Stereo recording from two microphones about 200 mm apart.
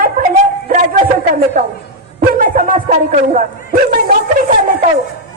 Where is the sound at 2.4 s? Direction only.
45° right (ahead or behind).